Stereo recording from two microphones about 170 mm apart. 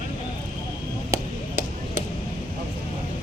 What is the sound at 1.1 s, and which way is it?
Chop, 15° right (ahead or behind).